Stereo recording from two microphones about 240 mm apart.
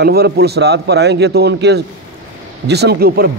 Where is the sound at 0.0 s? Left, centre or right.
Right.